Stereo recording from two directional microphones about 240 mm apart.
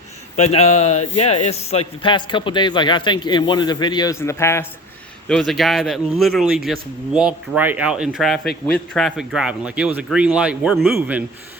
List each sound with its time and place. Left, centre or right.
0.3 s a man's voice: left; by 10.9 s centre